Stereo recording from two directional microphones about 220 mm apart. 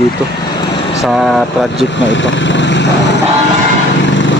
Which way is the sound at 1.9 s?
55° left (ahead or behind).